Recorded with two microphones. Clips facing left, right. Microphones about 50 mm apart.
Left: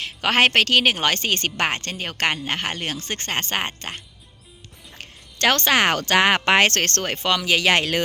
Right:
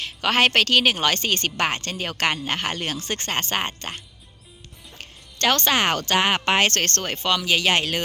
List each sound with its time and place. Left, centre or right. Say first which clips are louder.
0.0 s a woman's voice: left 1 dB; left
1.9 s speech: even; left
4.9 s speech: left 2 dB; left